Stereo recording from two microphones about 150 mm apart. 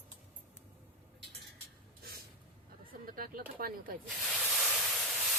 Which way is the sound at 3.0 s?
70° right (ahead or behind).